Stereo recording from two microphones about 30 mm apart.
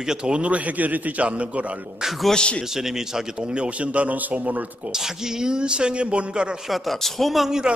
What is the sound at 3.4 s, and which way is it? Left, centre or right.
Speech, right.